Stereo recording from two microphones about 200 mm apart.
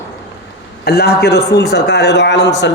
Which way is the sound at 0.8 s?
55° left (ahead or behind).